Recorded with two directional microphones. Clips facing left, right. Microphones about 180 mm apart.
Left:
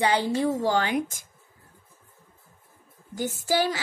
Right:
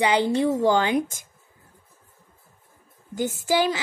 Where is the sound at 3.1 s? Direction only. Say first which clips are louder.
Right 3 dB; 20° right (ahead or behind).